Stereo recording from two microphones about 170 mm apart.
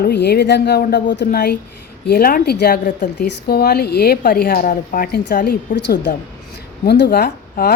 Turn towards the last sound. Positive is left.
turn(degrees=65)  # may be behind; listen again after turning